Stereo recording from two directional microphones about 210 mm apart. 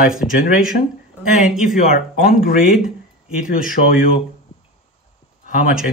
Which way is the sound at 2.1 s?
40° left (ahead or behind).